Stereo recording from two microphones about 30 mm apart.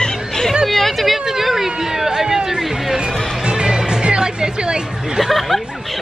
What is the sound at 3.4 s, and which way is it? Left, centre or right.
Music, right.